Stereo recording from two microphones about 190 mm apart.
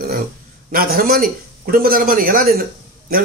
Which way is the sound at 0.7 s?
50° right (ahead or behind).